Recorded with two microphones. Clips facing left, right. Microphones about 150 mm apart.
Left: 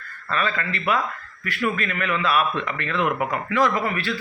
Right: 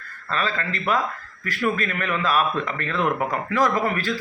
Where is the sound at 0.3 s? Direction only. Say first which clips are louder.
Left 1 dB; 35° right (ahead or behind).